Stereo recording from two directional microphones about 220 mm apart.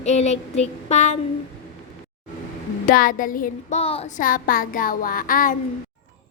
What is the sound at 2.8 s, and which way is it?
A woman's voice, 40° left (ahead or behind).